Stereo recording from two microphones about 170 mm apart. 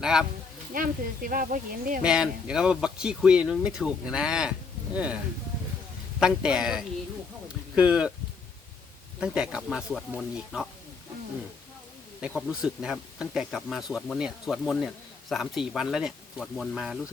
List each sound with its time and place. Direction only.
0.0 s speech: 5° right (ahead or behind)
0.7 s speech: 55° right (ahead or behind)
2.0 s speech: 5° right (ahead or behind)
9.2 s speech: 5° right (ahead or behind)
12.2 s speech: 5° right (ahead or behind)